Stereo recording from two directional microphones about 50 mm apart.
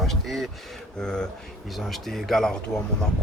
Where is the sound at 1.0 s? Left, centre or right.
Centre.